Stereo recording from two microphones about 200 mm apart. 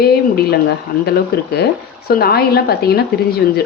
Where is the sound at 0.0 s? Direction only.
55° left (ahead or behind).